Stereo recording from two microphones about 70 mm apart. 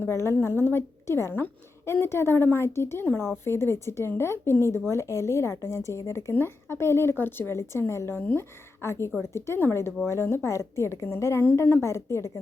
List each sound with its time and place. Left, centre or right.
0.0 s speech: left
6.3 s a woman's voice: left